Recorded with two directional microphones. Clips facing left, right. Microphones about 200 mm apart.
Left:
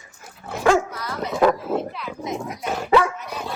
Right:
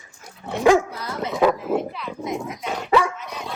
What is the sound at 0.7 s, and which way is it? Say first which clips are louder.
Dog: right 2 dB; 15° right (ahead or behind).